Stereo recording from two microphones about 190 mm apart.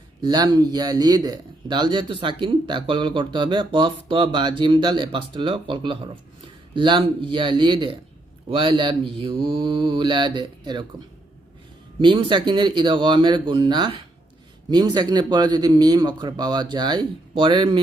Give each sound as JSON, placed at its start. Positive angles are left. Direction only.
{"t": 0.2, "sound": "speech", "side_deg": -20}
{"t": 11.9, "sound": "speech", "side_deg": -25}